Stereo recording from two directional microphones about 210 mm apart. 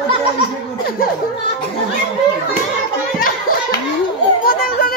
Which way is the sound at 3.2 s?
40° left (ahead or behind).